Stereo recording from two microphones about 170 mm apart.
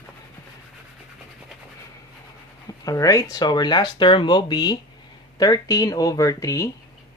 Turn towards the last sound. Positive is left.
turn(degrees=20)  # may be behind; listen again after turning